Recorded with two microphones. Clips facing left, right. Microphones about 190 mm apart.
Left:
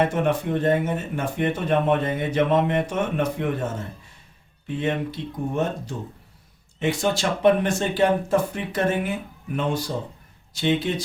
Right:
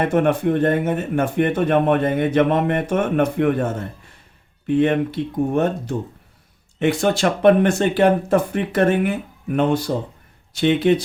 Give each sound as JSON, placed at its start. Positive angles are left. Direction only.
{"t": 0.0, "sound": "speech", "side_deg": -55}
{"t": 4.6, "sound": "speech", "side_deg": -60}